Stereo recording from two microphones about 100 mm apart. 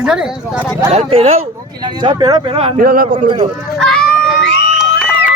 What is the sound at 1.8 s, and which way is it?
Speech, 45° right (ahead or behind).